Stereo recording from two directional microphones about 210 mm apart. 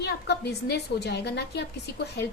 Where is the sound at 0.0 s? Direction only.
50° left (ahead or behind).